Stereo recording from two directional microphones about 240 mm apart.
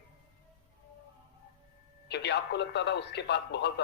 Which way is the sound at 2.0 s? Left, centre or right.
Left.